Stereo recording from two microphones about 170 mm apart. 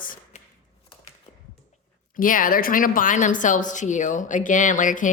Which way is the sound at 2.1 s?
50° left (ahead or behind).